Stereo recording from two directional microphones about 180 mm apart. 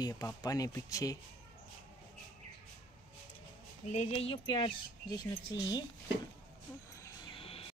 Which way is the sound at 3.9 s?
35° left (ahead or behind).